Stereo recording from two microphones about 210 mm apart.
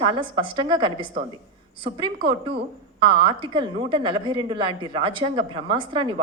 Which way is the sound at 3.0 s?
25° right (ahead or behind).